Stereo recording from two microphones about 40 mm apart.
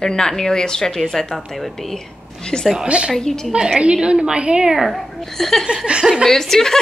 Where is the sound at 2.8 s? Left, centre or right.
Right.